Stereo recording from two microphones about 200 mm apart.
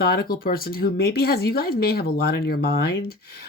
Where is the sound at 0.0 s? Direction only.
50° left (ahead or behind).